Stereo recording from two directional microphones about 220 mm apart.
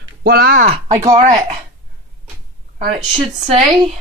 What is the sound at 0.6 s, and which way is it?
Speech, 30° right (ahead or behind).